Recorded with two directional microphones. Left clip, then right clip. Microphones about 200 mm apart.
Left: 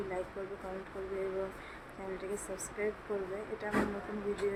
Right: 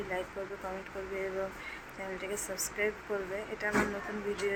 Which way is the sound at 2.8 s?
5° left (ahead or behind).